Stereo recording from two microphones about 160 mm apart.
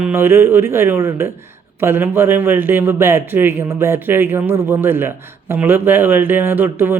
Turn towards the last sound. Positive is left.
turn(degrees=-10)  # may be behind; listen again after turning